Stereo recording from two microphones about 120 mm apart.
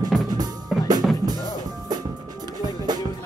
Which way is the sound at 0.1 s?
Centre (ahead or behind).